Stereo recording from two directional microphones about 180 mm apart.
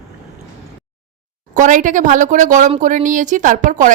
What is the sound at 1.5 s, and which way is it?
A woman's voice, 45° right (ahead or behind).